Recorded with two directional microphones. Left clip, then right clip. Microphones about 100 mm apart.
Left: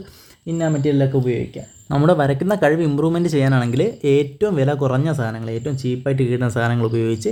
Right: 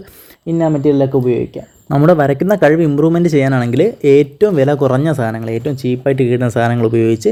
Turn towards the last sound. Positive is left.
turn(degrees=-25)  # may be behind; listen again after turning